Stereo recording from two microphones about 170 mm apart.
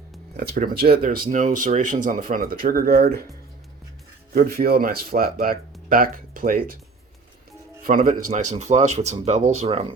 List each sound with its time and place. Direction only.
0.3 s speech: 65° right (ahead or behind)
4.4 s speech: 65° right (ahead or behind)
7.8 s speech: 55° right (ahead or behind); by 9.8 s 35° right (ahead or behind)